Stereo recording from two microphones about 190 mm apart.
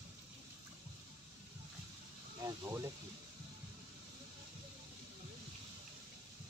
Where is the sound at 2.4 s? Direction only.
15° right (ahead or behind).